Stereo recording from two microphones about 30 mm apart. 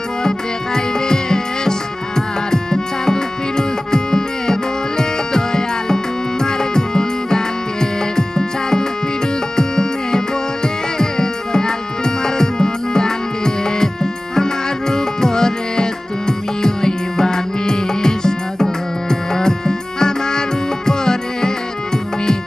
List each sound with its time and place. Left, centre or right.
0.2 s music: left